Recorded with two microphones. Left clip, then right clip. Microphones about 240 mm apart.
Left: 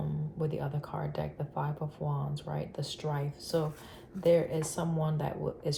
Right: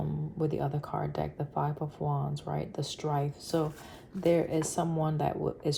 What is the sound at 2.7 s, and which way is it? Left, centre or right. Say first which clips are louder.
Speech: right 5 dB; right.